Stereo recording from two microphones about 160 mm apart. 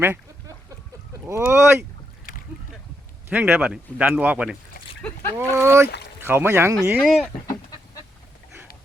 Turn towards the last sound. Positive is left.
turn(degrees=0)  # may be behind; listen again after turning